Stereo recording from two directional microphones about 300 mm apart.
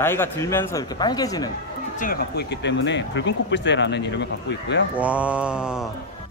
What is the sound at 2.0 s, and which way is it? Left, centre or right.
Speech, left.